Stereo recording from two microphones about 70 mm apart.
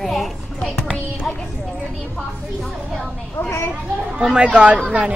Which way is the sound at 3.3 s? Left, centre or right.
Left.